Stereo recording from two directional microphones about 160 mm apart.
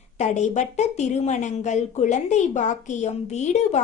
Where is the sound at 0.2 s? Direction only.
45° left (ahead or behind).